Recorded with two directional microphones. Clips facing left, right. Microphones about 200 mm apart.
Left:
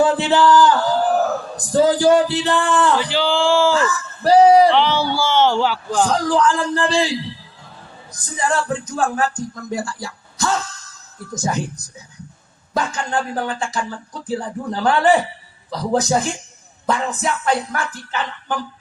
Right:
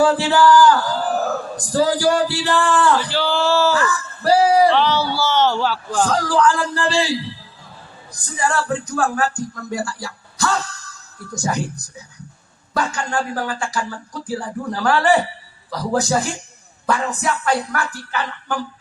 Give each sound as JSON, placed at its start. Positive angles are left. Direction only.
{"t": 0.0, "sound": "a sound", "side_deg": 20}
{"t": 8.4, "sound": "speech", "side_deg": 20}
{"t": 12.7, "sound": "speech", "side_deg": 20}